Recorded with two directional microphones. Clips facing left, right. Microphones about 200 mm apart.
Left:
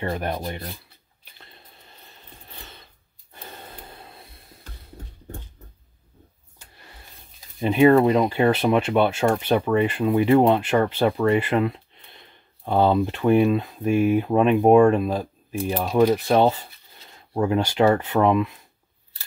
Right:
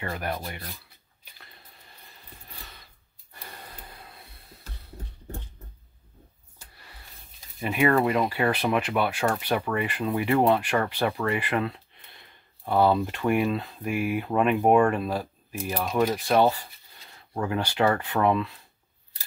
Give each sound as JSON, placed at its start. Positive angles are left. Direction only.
{"t": 0.0, "sound": "speech", "side_deg": 30}
{"t": 3.3, "sound": "gasp", "side_deg": 25}
{"t": 7.6, "sound": "speech", "side_deg": 25}